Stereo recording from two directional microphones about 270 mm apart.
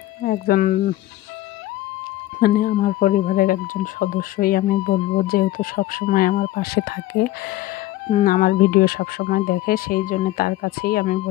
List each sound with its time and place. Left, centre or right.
0.2 s speech: left
2.4 s speech: left
8.1 s speech: left